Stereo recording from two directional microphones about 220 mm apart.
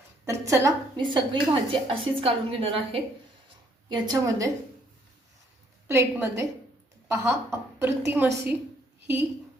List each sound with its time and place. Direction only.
0.3 s a woman's voice: 15° right (ahead or behind)
4.1 s a woman's voice: 15° right (ahead or behind)
5.9 s a woman's voice: 10° right (ahead or behind)